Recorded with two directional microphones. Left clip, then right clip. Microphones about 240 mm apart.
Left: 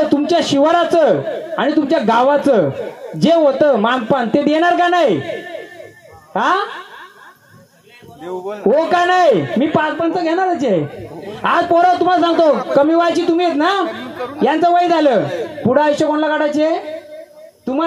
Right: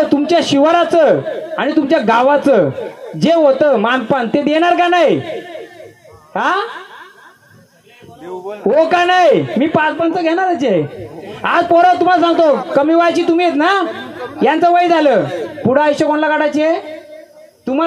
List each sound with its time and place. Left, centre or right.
0.0 s a man's voice: centre
6.3 s speech: centre
8.6 s a man's voice: centre
15.2 s a man's voice: right
15.6 s a man's voice: centre